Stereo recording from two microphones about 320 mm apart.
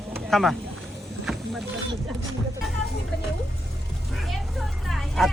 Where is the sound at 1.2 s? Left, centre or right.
Centre.